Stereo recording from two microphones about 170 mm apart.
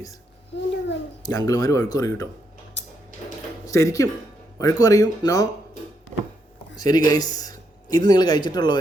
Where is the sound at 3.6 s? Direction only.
20° left (ahead or behind).